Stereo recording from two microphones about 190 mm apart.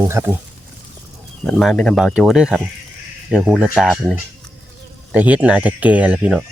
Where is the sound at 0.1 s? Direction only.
10° right (ahead or behind).